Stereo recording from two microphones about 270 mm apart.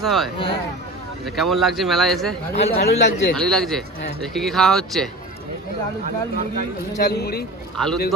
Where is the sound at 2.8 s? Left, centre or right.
Left.